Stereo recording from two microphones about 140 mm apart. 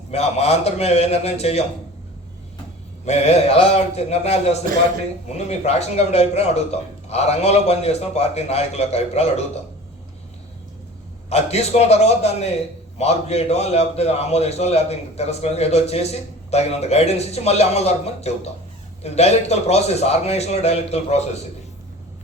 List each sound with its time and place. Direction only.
0.1 s a man's voice: 50° left (ahead or behind)
3.1 s a man's voice: 50° left (ahead or behind)
11.3 s a man's voice: 50° left (ahead or behind)